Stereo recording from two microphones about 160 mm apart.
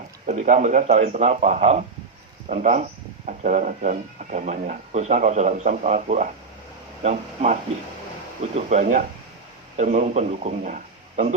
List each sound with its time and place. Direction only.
0.3 s a man's voice: 50° right (ahead or behind)